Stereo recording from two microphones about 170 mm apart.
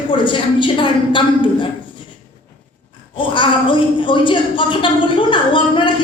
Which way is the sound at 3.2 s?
30° left (ahead or behind).